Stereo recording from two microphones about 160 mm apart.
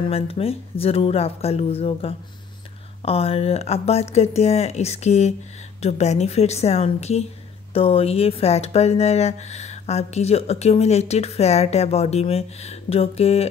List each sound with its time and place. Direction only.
0.1 s a woman's voice: 35° left (ahead or behind)